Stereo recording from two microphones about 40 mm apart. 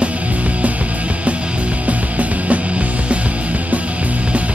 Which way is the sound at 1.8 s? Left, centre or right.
Right.